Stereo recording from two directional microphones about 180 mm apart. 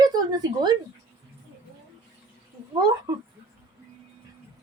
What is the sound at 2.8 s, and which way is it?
Speech, 20° right (ahead or behind).